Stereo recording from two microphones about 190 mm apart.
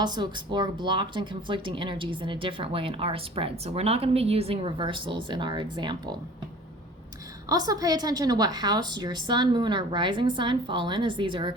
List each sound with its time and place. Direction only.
0.0 s speech: 25° right (ahead or behind)
7.4 s speech: 20° right (ahead or behind)